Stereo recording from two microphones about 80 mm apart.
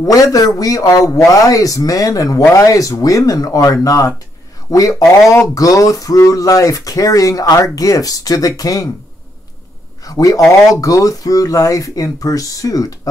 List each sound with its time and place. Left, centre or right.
0.0 s speech: left
10.0 s speech: left